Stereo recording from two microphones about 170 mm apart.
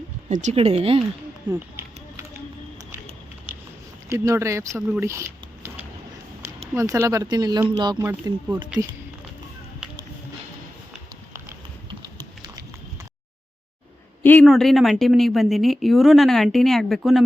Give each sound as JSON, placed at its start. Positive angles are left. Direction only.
{"t": 0.3, "sound": "speech", "side_deg": -45}
{"t": 1.5, "sound": "a sound", "side_deg": -15}
{"t": 4.1, "sound": "speech", "side_deg": -15}
{"t": 14.4, "sound": "speech", "side_deg": 0}